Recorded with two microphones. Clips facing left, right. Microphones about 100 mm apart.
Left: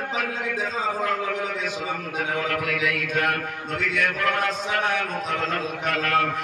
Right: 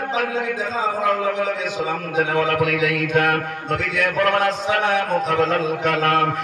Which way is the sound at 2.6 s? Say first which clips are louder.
Right 6 dB; 65° right (ahead or behind).